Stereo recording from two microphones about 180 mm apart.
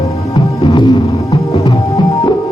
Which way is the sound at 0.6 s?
25° left (ahead or behind).